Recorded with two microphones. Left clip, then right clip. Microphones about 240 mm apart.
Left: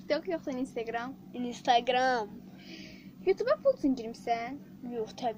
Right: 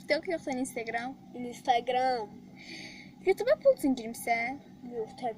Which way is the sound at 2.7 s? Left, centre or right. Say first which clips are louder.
Right 4 dB; right.